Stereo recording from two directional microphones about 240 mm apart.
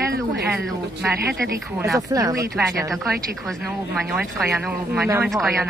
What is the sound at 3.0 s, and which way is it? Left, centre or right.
Speech, centre.